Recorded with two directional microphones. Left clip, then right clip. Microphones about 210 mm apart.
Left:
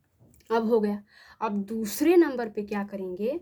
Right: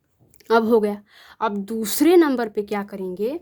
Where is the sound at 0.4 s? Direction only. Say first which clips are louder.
Right 7 dB; 40° right (ahead or behind).